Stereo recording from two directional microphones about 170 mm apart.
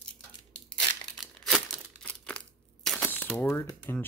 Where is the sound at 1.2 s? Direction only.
Centre (ahead or behind).